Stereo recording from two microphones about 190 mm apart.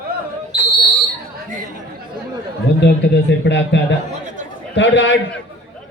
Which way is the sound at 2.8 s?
65° left (ahead or behind).